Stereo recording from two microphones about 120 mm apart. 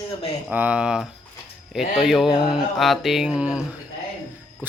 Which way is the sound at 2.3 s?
35° left (ahead or behind).